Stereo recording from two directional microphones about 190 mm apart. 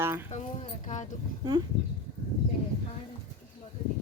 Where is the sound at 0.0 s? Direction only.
15° right (ahead or behind).